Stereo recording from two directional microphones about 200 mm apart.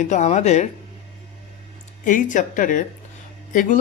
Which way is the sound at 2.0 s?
40° left (ahead or behind).